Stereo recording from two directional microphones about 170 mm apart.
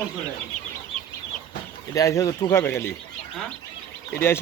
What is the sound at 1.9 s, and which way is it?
Speech, 20° left (ahead or behind).